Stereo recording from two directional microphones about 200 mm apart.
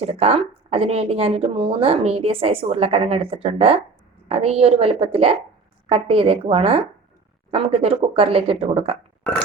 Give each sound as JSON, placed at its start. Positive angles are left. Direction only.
{"t": 0.0, "sound": "speech", "side_deg": -30}
{"t": 9.2, "sound": "burping", "side_deg": 5}